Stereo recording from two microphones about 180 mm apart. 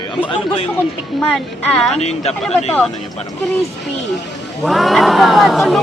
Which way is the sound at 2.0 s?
35° left (ahead or behind).